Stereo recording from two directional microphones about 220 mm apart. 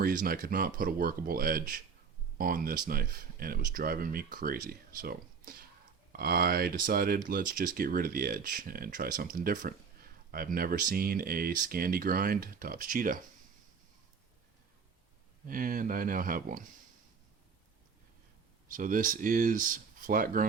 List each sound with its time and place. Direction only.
0.0 s speech: 40° right (ahead or behind)
15.4 s speech: 40° right (ahead or behind)
18.7 s speech: 40° right (ahead or behind)